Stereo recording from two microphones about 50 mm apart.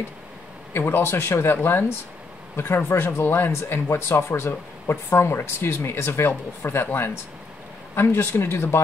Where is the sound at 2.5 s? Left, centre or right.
Left.